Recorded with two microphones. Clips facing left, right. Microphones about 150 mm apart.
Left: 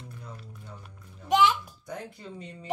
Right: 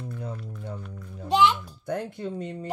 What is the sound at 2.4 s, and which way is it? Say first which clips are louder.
Speech: right 9 dB; 50° right (ahead or behind).